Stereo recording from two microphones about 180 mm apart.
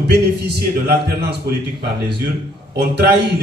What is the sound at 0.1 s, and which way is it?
Speech, 65° right (ahead or behind).